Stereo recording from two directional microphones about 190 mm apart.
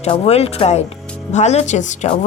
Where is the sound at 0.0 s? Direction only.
35° left (ahead or behind).